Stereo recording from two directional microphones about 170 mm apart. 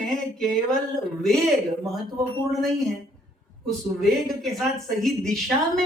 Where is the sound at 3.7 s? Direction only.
Centre (ahead or behind).